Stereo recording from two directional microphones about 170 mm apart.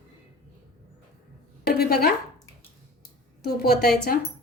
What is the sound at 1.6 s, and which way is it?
Speech, 65° left (ahead or behind).